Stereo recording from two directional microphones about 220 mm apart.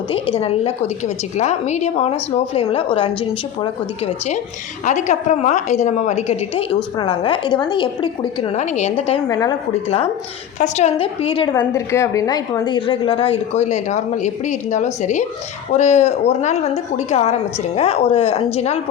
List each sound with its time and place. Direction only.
0.1 s a woman's voice: 25° left (ahead or behind)
9.3 s a woman's voice: 15° left (ahead or behind)
10.6 s a woman's voice: 30° left (ahead or behind)
11.7 s a woman's voice: 10° left (ahead or behind); by 18.8 s 30° left (ahead or behind)